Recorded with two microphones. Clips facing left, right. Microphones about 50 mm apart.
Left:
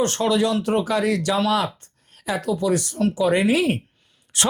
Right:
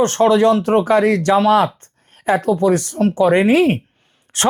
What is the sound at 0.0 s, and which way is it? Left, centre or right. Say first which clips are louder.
Speech: right 7 dB; right.